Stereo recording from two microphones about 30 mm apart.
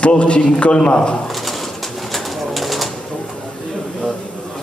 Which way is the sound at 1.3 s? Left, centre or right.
Centre.